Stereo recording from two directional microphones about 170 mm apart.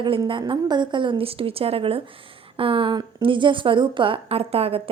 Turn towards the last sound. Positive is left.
turn(degrees=-35)  # may be behind; listen again after turning